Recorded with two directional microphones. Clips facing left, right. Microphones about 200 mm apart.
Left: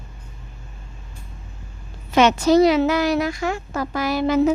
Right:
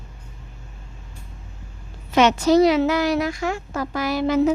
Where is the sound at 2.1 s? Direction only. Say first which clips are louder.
Left 1 dB; 40° left (ahead or behind).